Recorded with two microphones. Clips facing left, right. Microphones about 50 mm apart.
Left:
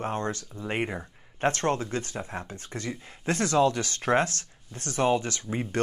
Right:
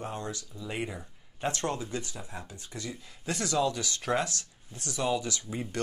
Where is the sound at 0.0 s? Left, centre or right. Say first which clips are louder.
Left 6 dB; left.